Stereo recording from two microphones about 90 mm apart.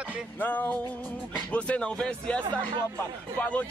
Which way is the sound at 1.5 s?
10° left (ahead or behind).